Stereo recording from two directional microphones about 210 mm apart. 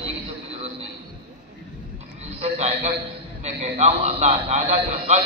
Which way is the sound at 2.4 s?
30° right (ahead or behind).